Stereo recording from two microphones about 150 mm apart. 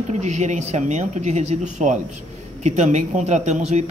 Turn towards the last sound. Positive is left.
turn(degrees=-50)  # may be behind; listen again after turning